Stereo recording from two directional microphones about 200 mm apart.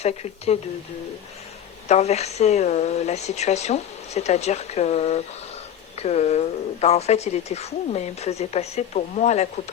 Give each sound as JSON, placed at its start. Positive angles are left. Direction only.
{"t": 0.0, "sound": "speech", "side_deg": 30}
{"t": 1.9, "sound": "speech", "side_deg": 35}